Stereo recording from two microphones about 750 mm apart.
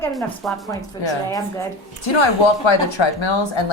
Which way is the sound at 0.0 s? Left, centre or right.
Centre.